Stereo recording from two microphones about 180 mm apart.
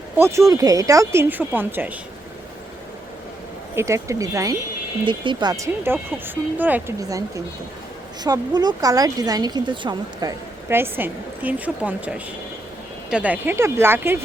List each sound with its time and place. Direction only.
0.2 s speech: 15° right (ahead or behind)
3.8 s speech: 15° right (ahead or behind)